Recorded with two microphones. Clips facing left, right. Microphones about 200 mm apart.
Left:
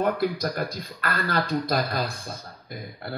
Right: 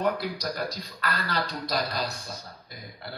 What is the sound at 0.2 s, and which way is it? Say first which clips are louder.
Speech: left 5 dB; 55° left (ahead or behind).